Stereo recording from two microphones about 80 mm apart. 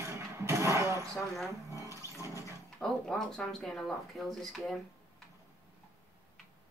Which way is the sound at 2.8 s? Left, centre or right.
Centre.